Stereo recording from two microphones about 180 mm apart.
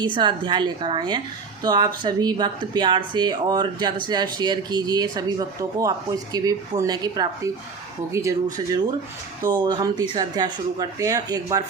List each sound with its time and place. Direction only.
0.0 s speech: 25° right (ahead or behind)
9.4 s speech: 25° right (ahead or behind)